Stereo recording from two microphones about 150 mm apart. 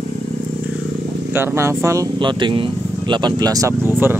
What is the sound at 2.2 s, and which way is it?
Speech, 35° right (ahead or behind).